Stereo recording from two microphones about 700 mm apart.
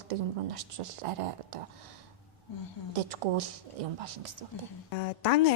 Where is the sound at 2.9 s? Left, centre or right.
Right.